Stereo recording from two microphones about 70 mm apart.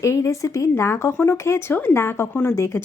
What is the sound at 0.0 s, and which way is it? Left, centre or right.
Speech, left.